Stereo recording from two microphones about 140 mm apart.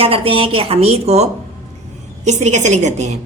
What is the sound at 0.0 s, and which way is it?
A woman's voice, 40° right (ahead or behind).